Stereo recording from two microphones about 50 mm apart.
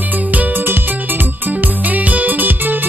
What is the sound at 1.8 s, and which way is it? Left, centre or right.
Music, right.